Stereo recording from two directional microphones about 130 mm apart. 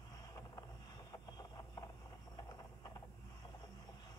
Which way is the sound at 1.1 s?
30° left (ahead or behind).